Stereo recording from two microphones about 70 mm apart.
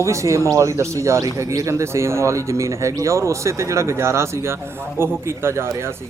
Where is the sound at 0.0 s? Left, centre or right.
Right.